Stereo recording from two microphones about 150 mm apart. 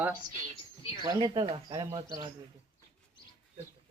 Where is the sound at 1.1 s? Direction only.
30° right (ahead or behind).